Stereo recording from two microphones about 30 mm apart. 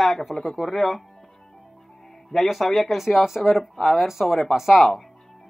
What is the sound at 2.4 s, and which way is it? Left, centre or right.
Speech, centre.